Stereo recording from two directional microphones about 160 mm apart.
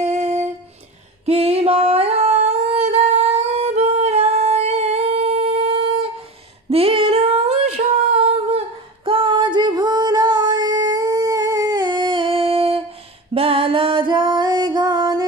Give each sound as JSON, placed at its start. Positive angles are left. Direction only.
{"t": 0.0, "sound": "humming", "side_deg": -45}
{"t": 1.2, "sound": "singing", "side_deg": -40}
{"t": 6.7, "sound": "humming", "side_deg": -35}
{"t": 13.3, "sound": "music", "side_deg": -35}